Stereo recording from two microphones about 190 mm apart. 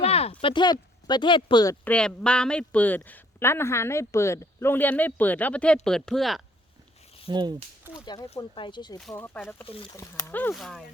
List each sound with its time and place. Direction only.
0.0 s speech: 35° left (ahead or behind)
1.8 s speech: 5° left (ahead or behind)
7.3 s speech: 20° right (ahead or behind)
8.0 s speech: 20° left (ahead or behind)
9.0 s speech: centre (ahead or behind)
9.6 s speech: 30° left (ahead or behind)
9.9 s speech: 15° left (ahead or behind)
10.5 s speech: centre (ahead or behind)